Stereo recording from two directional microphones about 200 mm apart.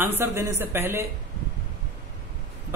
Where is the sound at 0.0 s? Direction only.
10° right (ahead or behind).